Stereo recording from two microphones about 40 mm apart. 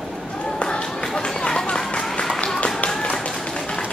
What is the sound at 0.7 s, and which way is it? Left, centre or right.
Run, centre.